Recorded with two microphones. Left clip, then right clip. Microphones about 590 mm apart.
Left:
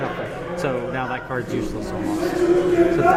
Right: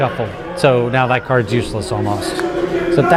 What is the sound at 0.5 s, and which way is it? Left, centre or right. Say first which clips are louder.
Speech: right 12 dB; right.